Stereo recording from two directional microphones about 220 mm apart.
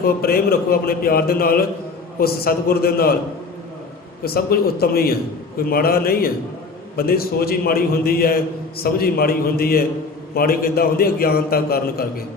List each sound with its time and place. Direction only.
0.0 s a man's voice: 45° left (ahead or behind)
4.2 s a man's voice: 45° left (ahead or behind)